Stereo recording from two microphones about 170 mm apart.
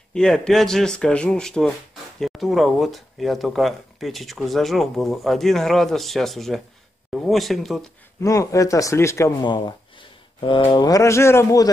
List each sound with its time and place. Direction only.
0.1 s speech: 5° left (ahead or behind)
8.2 s speech: 20° left (ahead or behind)
9.4 s speech: 25° left (ahead or behind)